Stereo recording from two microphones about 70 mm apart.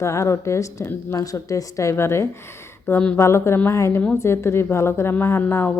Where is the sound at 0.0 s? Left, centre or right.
Left.